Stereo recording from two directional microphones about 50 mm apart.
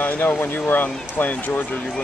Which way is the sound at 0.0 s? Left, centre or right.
Left.